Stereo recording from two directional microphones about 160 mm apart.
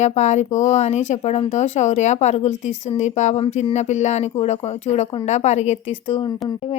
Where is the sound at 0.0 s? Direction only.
45° left (ahead or behind).